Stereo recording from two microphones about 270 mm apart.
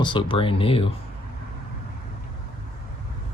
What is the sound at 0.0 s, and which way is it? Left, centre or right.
Speech, centre.